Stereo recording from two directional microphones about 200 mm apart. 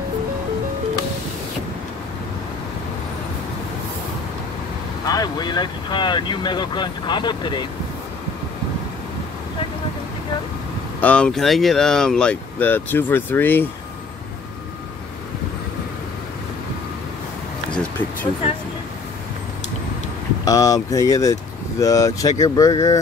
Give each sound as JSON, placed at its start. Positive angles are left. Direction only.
{"t": 5.0, "sound": "speech", "side_deg": 20}
{"t": 11.0, "sound": "speech", "side_deg": 5}
{"t": 17.7, "sound": "a sound", "side_deg": 10}
{"t": 20.4, "sound": "speech", "side_deg": 15}